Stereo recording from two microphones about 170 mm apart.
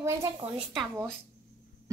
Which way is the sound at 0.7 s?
Centre (ahead or behind).